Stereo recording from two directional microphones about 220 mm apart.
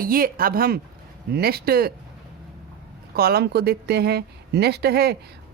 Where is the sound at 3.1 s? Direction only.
45° right (ahead or behind).